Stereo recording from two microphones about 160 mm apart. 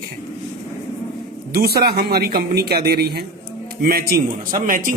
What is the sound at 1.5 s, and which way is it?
A man's voice, 80° right.